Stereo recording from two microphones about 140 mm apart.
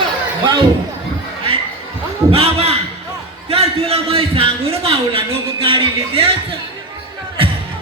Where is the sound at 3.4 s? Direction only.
45° right (ahead or behind).